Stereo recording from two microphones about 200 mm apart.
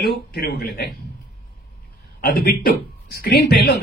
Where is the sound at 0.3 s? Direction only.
50° left (ahead or behind).